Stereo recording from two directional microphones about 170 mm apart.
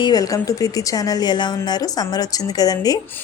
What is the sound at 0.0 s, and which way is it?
A woman's voice, 20° left (ahead or behind).